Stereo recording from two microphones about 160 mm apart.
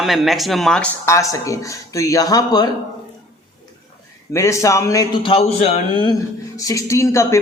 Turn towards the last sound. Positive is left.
turn(degrees=15)  # may be behind; listen again after turning